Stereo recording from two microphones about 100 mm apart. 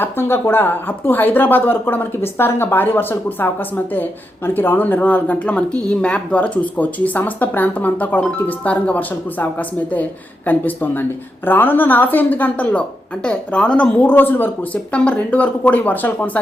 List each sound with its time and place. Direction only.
0.0 s speech: 20° left (ahead or behind)